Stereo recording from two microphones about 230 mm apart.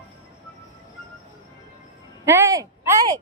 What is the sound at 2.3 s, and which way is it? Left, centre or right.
Speech, centre.